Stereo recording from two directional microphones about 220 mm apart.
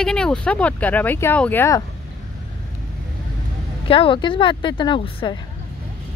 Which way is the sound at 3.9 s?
25° left (ahead or behind).